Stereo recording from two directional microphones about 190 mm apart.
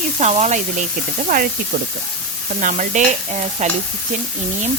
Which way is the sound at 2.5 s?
45° right (ahead or behind).